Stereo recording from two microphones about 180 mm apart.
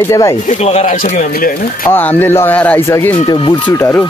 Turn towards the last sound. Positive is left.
turn(degrees=10)  # may be behind; listen again after turning